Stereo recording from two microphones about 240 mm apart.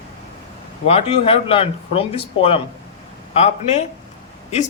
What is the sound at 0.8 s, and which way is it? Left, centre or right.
Speech, left.